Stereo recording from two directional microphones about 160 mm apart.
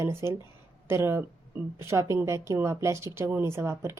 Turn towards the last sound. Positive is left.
turn(degrees=-15)  # may be behind; listen again after turning